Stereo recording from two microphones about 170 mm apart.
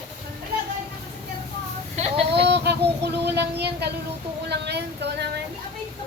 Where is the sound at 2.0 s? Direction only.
35° right (ahead or behind).